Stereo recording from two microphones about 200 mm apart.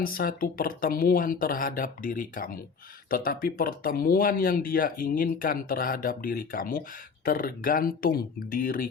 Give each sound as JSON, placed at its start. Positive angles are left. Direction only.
{"t": 0.0, "sound": "speech", "side_deg": 45}